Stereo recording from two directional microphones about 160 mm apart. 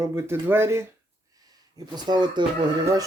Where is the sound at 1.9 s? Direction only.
25° right (ahead or behind).